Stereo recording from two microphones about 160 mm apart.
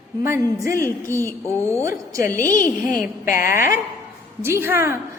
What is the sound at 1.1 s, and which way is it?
Music, 15° left (ahead or behind).